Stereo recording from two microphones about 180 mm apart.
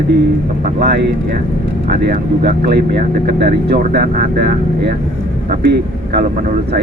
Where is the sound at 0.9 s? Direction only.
70° right (ahead or behind).